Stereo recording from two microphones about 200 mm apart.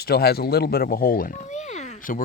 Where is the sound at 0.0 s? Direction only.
50° left (ahead or behind).